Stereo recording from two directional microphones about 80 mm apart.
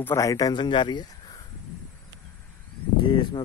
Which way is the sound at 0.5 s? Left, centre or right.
Left.